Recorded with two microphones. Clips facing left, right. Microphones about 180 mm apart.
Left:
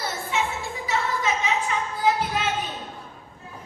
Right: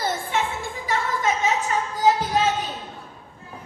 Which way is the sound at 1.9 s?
40° right (ahead or behind).